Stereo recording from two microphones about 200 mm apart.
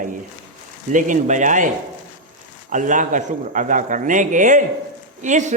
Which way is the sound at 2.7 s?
40° right (ahead or behind).